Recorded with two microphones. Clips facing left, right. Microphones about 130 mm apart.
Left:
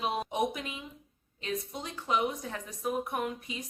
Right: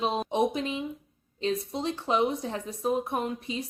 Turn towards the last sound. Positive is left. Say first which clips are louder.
# right 4 dB
turn(degrees=-30)  # may be behind; listen again after turning